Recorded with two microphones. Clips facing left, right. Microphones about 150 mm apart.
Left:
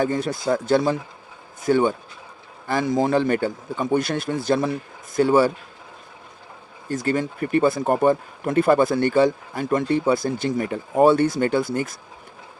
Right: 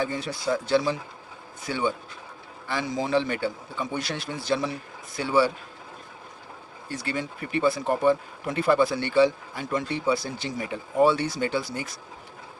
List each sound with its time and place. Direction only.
0.0 s speech: 45° left (ahead or behind)
6.8 s speech: 45° left (ahead or behind)